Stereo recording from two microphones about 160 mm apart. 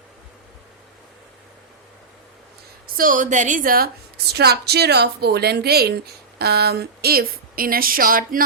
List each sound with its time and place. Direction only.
2.8 s a woman's voice: 60° right (ahead or behind)
4.3 s a woman's voice: 90° right
6.4 s a woman's voice: 90° right; by 8.4 s 60° right (ahead or behind)